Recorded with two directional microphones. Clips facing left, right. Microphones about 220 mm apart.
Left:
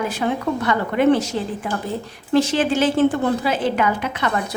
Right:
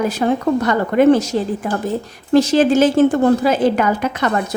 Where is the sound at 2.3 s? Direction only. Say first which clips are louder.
Right 6 dB; 40° right (ahead or behind).